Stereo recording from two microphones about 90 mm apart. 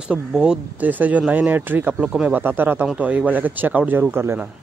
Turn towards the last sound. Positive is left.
turn(degrees=-25)  # may be behind; listen again after turning